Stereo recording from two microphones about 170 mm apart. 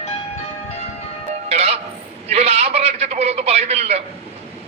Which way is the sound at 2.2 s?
35° right (ahead or behind).